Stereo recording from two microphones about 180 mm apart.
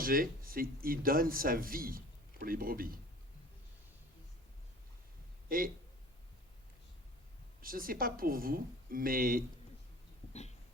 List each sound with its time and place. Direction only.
0.0 s speech: 50° right (ahead or behind)
5.5 s speech: 50° right (ahead or behind)
7.6 s a woman's voice: 50° right (ahead or behind)